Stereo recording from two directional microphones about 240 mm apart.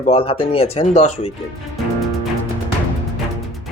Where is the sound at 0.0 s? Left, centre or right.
Left.